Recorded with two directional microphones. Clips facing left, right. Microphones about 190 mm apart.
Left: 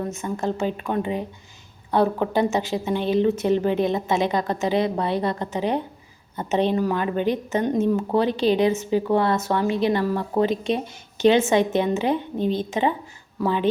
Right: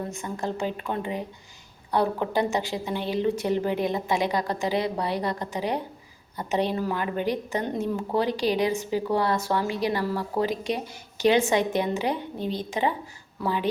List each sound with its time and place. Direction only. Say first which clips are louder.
0.1 s a woman's voice: left 5 dB; 20° left (ahead or behind)